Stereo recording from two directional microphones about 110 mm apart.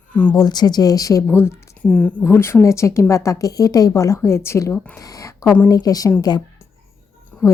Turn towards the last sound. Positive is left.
turn(degrees=10)  # may be behind; listen again after turning